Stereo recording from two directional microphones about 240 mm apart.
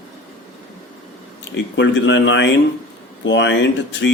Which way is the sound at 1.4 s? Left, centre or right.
Left.